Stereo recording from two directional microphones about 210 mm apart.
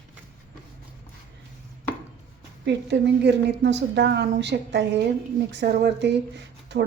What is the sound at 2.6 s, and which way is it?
A woman's voice, 55° right (ahead or behind).